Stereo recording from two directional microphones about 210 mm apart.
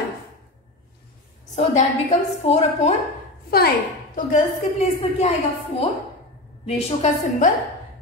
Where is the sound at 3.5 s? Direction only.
45° left (ahead or behind).